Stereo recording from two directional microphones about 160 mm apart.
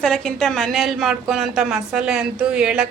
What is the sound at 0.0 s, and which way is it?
A woman's voice, 5° left (ahead or behind).